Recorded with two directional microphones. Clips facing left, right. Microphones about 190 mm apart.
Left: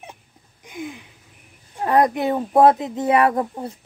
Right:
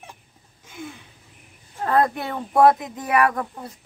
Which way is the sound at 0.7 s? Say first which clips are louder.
Left 5 dB; 15° left (ahead or behind).